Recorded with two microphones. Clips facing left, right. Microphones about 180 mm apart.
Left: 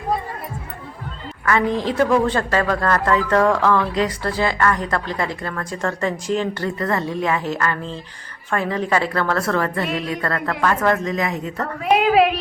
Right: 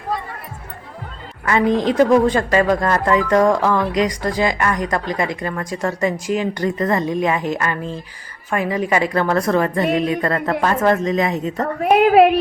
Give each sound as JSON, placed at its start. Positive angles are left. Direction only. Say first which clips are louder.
{"t": 1.8, "sound": "a woman's voice", "louder": "right 4 dB", "side_deg": -20}
{"t": 11.6, "sound": "a woman's voice", "louder": "right 4 dB", "side_deg": -50}